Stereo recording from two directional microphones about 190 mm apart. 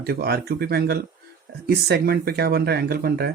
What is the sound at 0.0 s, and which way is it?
Speech, 55° right (ahead or behind).